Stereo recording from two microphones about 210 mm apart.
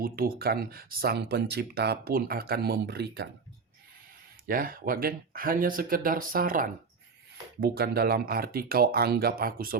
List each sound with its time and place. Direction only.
0.0 s speech: 45° right (ahead or behind)
4.4 s speech: 45° right (ahead or behind)